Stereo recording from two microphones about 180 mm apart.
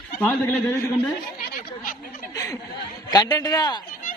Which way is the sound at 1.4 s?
50° left (ahead or behind).